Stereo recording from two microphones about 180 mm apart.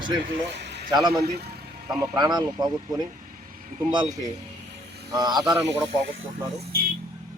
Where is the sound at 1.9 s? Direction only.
20° right (ahead or behind).